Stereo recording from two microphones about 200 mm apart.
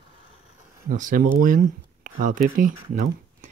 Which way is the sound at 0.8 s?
40° right (ahead or behind).